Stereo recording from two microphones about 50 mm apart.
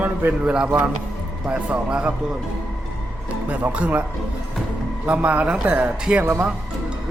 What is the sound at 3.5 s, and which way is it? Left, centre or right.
Speech, right.